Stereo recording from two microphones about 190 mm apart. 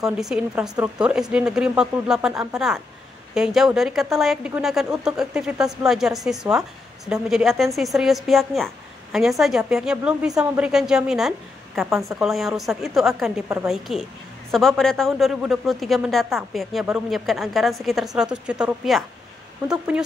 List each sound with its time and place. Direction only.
0.0 s a woman's voice: 5° right (ahead or behind)
0.7 s speech: 20° right (ahead or behind)
1.0 s a woman's voice: 5° right (ahead or behind)